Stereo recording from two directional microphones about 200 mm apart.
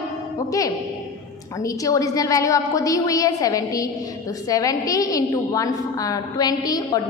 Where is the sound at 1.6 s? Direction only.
15° left (ahead or behind).